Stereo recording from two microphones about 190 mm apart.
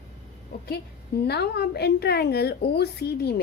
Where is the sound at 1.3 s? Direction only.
60° left (ahead or behind).